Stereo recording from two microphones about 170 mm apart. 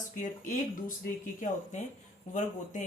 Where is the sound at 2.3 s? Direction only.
45° left (ahead or behind).